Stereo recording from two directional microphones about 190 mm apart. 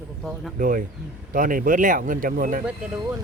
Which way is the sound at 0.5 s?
45° right (ahead or behind).